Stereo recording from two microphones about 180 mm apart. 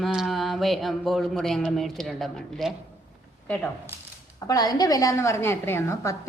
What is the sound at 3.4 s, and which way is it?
Speech, 10° left (ahead or behind).